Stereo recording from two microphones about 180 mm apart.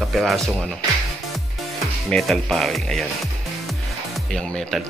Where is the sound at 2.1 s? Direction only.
Centre (ahead or behind).